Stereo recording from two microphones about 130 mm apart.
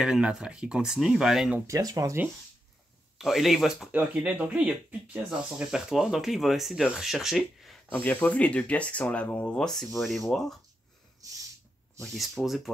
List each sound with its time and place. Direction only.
0.0 s speech: 5° right (ahead or behind)
1.7 s speech: 25° right (ahead or behind)
3.2 s speech: centre (ahead or behind)
7.9 s speech: 15° left (ahead or behind)
12.0 s speech: centre (ahead or behind)